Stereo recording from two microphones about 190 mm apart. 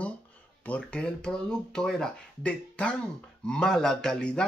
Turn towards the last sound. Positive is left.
turn(degrees=5)  # may be behind; listen again after turning